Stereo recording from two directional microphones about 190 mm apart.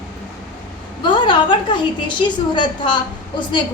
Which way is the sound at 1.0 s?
25° left (ahead or behind).